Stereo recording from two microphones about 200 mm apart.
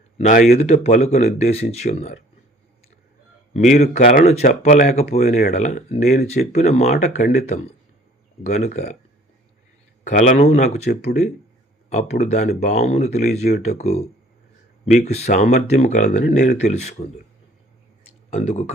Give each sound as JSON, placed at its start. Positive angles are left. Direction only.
{"t": 0.2, "sound": "speech", "side_deg": 40}
{"t": 3.5, "sound": "speech", "side_deg": 35}
{"t": 10.0, "sound": "speech", "side_deg": 35}
{"t": 15.0, "sound": "speech", "side_deg": 35}
{"t": 18.3, "sound": "speech", "side_deg": 35}